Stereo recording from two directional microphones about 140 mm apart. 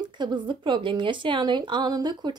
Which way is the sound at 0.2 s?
35° right (ahead or behind).